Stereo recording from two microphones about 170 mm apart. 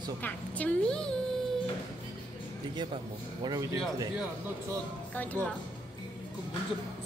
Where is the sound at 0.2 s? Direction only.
10° left (ahead or behind).